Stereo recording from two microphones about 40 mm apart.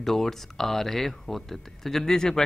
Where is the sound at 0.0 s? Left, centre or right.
Centre.